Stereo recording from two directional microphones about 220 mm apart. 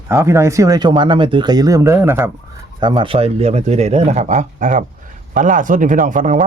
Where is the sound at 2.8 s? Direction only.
20° right (ahead or behind).